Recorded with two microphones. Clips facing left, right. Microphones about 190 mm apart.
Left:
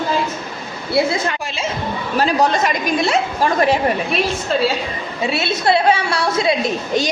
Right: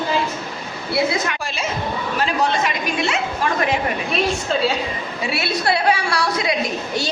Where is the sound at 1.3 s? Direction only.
25° left (ahead or behind).